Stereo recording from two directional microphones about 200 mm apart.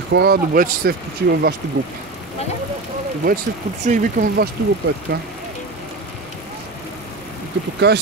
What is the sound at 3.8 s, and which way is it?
Speech, 40° right (ahead or behind).